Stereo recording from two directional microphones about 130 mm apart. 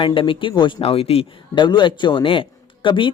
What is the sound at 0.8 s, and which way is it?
Speech, 50° left (ahead or behind).